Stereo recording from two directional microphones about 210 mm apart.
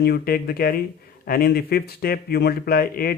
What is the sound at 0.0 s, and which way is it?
Speech, 45° left (ahead or behind).